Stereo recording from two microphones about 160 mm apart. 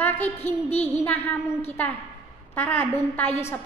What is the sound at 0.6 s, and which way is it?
Speech, 40° left (ahead or behind).